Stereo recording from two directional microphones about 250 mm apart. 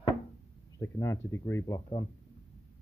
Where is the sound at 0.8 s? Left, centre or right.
Centre.